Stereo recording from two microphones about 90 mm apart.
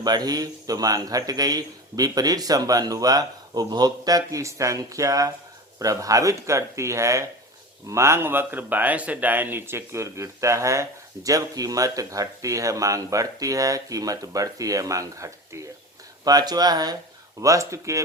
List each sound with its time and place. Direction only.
0.0 s speech: 50° right (ahead or behind)
16.2 s speech: 50° right (ahead or behind)
17.4 s speech: 35° right (ahead or behind)